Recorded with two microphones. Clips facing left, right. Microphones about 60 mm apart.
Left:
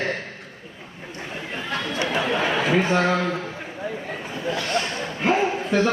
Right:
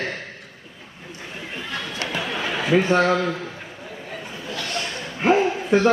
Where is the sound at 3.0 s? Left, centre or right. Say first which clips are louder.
Right 1 dB; centre.